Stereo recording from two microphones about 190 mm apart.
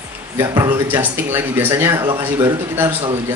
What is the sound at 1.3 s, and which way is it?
Speech, 10° right (ahead or behind).